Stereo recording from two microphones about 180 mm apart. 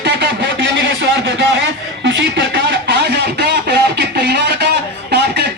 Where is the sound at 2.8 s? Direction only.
65° right (ahead or behind).